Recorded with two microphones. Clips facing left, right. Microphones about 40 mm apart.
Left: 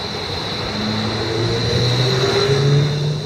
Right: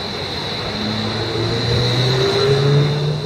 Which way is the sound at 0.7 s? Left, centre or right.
Centre.